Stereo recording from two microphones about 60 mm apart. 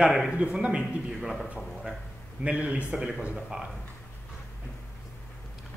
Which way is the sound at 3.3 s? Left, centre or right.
Centre.